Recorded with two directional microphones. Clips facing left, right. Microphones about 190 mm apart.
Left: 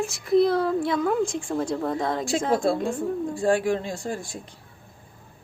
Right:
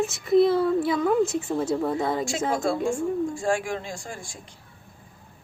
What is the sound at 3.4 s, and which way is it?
Speech, 35° left (ahead or behind).